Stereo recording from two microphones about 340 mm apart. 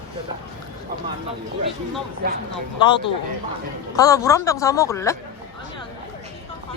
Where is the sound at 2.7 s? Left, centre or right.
Centre.